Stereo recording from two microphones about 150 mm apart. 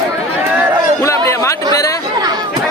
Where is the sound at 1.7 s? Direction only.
20° left (ahead or behind).